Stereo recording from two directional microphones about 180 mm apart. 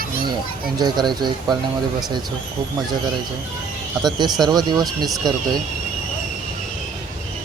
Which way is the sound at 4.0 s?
25° right (ahead or behind).